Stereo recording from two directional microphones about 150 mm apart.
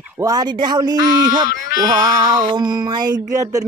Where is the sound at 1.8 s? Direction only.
25° right (ahead or behind).